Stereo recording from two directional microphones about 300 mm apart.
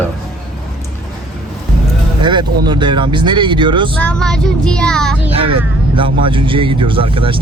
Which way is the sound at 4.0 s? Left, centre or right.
Centre.